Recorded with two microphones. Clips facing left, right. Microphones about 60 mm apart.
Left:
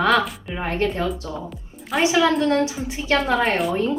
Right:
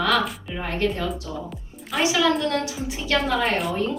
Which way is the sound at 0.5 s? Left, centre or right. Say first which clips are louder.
Left 3 dB; left.